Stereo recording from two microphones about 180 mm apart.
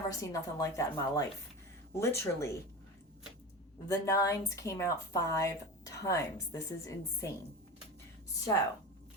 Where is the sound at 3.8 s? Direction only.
15° left (ahead or behind).